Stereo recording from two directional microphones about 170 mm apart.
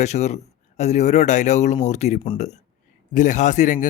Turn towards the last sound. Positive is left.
turn(degrees=50)  # may be behind; listen again after turning